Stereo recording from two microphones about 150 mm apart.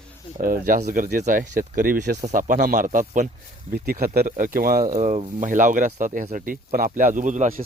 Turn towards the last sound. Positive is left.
turn(degrees=-55)  # may be behind; listen again after turning